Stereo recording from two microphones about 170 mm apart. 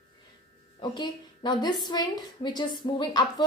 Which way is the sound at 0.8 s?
25° left (ahead or behind).